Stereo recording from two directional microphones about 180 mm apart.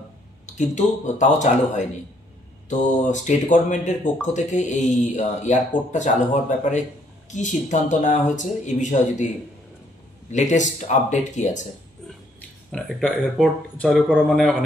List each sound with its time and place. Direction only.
0.5 s speech: 40° left (ahead or behind)
10.3 s speech: 40° left (ahead or behind)
12.7 s speech: centre (ahead or behind)